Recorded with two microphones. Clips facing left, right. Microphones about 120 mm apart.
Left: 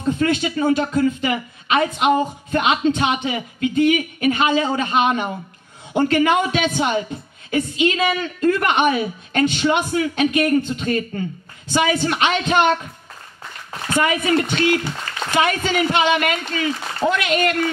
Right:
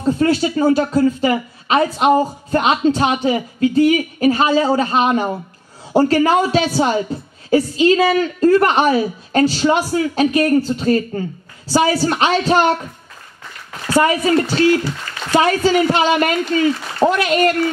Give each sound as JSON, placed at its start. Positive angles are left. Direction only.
{"t": 0.0, "sound": "speech", "side_deg": -35}
{"t": 13.8, "sound": "speech", "side_deg": -35}